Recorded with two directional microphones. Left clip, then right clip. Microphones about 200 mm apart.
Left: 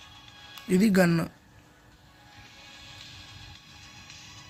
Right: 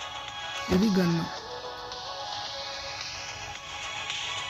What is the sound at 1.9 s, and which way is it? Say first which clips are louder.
Music: right 18 dB; 50° right (ahead or behind).